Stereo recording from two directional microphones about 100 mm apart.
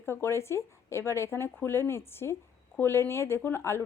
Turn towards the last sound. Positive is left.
turn(degrees=25)  # may be behind; listen again after turning